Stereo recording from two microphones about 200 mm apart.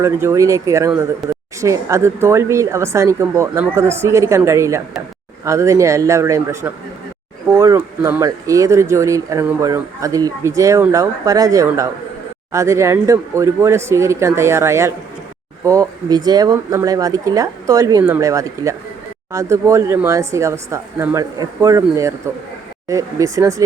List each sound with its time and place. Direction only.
0.0 s speech: 15° right (ahead or behind)
1.2 s speech: centre (ahead or behind)
1.6 s speech: 15° right (ahead or behind)